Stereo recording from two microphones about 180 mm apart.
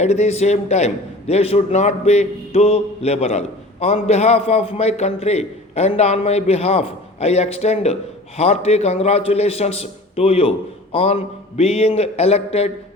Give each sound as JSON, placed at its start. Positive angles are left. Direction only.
{"t": 0.0, "sound": "a man's voice", "side_deg": 40}